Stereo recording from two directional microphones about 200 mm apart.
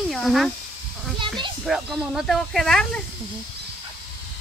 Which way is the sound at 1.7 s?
Centre (ahead or behind).